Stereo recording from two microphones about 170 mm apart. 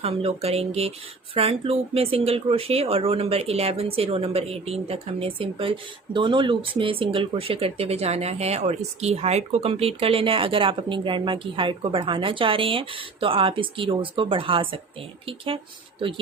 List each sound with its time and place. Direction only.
0.0 s speech: 35° right (ahead or behind)